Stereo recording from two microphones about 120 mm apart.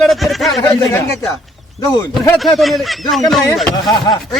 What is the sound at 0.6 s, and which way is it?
Speech, 20° left (ahead or behind).